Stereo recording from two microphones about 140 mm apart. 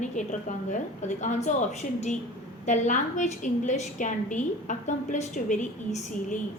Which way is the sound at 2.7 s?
60° left (ahead or behind).